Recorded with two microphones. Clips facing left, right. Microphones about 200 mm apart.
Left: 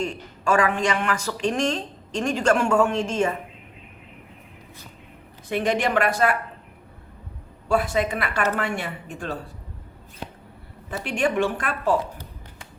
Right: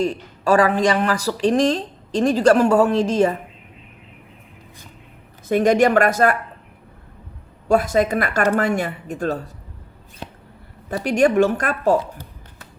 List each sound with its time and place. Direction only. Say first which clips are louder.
0.0 s a woman's voice: right 6 dB; 35° right (ahead or behind)
5.5 s speech: right 8 dB; 45° right (ahead or behind)
7.7 s a woman's voice: right 5 dB; 40° right (ahead or behind)
10.8 s a woman's voice: right 7 dB; 40° right (ahead or behind)